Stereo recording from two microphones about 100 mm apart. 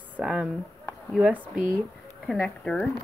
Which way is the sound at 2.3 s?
10° left (ahead or behind).